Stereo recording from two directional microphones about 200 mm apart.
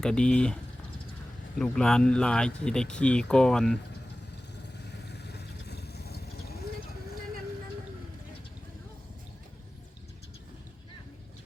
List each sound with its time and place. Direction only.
0.0 s speech: 5° left (ahead or behind)
4.9 s vehicle: 55° left (ahead or behind)